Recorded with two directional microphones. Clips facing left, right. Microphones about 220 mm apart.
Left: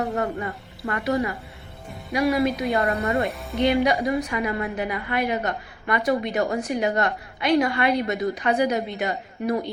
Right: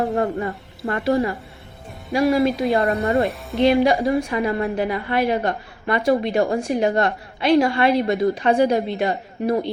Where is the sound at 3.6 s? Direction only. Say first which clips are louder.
Right 4 dB; 25° right (ahead or behind).